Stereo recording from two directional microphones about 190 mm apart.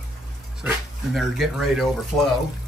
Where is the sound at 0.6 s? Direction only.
Centre (ahead or behind).